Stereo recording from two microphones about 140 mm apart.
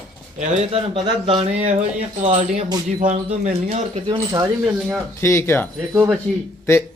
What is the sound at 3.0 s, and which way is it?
Speech, 55° right (ahead or behind).